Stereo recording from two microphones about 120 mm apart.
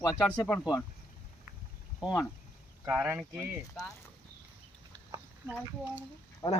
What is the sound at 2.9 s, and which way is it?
Speech, 15° right (ahead or behind).